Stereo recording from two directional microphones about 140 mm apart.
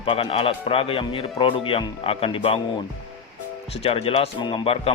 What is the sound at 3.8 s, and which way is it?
Speech, 45° left (ahead or behind).